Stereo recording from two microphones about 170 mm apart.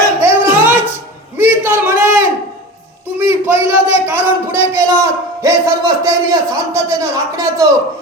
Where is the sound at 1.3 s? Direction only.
10° right (ahead or behind).